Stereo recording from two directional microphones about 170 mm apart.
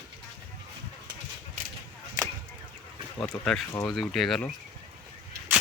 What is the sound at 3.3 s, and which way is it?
Speech, 10° left (ahead or behind).